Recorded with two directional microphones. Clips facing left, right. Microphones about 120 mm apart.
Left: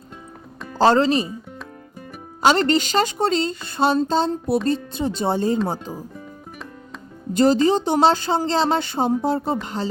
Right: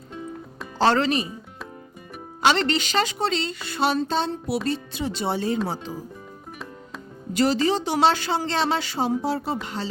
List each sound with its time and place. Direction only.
0.8 s speech: 35° left (ahead or behind)
2.5 s a woman's voice: 40° left (ahead or behind)
7.3 s a woman's voice: 45° left (ahead or behind)